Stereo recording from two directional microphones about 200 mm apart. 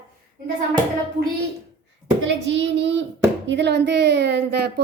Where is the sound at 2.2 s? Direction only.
60° right (ahead or behind).